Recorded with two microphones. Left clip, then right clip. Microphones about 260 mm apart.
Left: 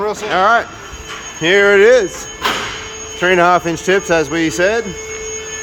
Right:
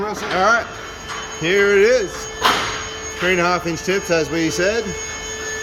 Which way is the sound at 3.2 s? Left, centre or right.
Centre.